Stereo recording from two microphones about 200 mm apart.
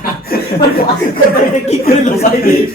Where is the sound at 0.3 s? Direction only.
50° left (ahead or behind).